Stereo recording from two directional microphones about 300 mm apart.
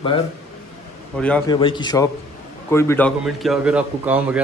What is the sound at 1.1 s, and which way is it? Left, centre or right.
Speech, centre.